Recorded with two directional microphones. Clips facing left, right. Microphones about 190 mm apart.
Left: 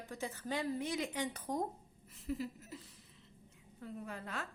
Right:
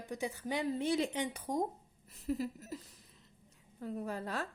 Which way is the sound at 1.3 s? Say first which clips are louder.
Right 3 dB; 15° right (ahead or behind).